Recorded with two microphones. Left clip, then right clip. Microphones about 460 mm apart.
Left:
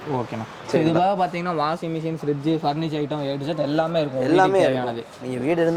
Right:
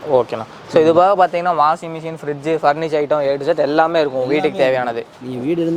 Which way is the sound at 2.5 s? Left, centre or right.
Right.